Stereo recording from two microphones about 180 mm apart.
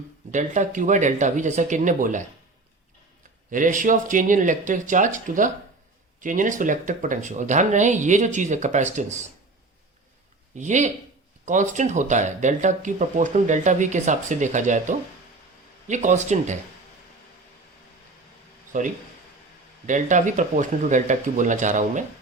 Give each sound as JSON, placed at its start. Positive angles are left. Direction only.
{"t": 0.3, "sound": "speech", "side_deg": -45}
{"t": 3.5, "sound": "speech", "side_deg": -45}
{"t": 10.5, "sound": "speech", "side_deg": -40}
{"t": 18.7, "sound": "speech", "side_deg": -45}